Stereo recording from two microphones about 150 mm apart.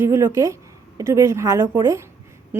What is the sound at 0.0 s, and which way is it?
A woman's voice, 15° right (ahead or behind).